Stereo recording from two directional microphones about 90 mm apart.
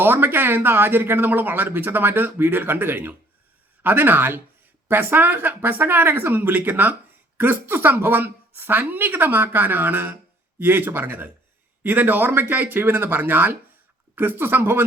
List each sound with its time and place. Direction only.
0.0 s speech: 25° right (ahead or behind)